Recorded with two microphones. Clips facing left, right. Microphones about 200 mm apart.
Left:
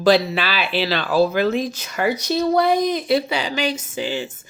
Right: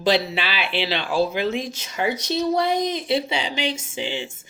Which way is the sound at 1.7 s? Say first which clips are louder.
Left 3 dB; 25° right (ahead or behind).